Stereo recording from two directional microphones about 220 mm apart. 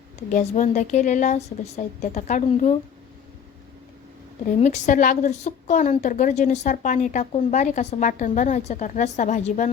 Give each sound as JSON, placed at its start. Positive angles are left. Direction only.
{"t": 0.3, "sound": "a woman's voice", "side_deg": 35}
{"t": 4.6, "sound": "a woman's voice", "side_deg": 35}